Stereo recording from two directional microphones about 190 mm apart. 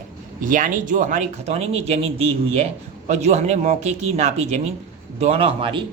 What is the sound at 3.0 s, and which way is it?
Speech, 35° right (ahead or behind).